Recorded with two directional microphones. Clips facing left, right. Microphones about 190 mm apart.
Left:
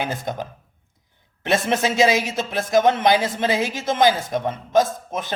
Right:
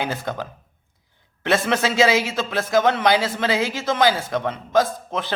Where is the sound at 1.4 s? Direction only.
20° left (ahead or behind).